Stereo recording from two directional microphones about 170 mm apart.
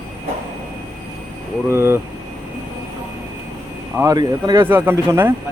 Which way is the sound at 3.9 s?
20° right (ahead or behind).